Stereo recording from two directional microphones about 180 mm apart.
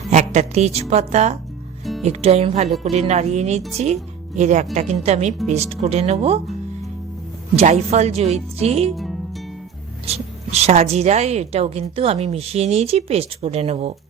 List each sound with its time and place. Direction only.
0.1 s a woman's voice: 40° right (ahead or behind)
1.8 s music: centre (ahead or behind)
2.0 s a woman's voice: 35° right (ahead or behind)
2.6 s speech: centre (ahead or behind)
2.9 s a woman's voice: 40° right (ahead or behind)
7.5 s a woman's voice: 40° right (ahead or behind)
10.1 s a woman's voice: 35° right (ahead or behind)